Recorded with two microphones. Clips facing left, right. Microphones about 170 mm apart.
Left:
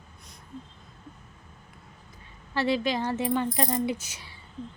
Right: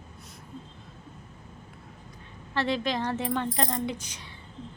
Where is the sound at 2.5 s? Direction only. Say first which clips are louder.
Left 2 dB; 5° left (ahead or behind).